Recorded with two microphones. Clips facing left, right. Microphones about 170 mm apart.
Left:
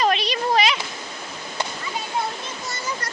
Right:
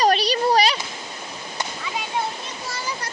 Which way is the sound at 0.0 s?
35° right (ahead or behind).